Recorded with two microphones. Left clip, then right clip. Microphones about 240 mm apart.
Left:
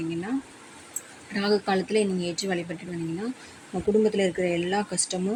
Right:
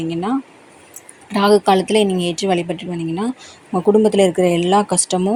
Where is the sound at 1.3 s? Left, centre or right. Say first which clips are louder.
Right 12 dB; right.